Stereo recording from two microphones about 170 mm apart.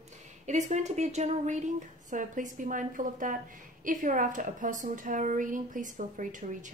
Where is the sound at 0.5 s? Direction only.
45° right (ahead or behind).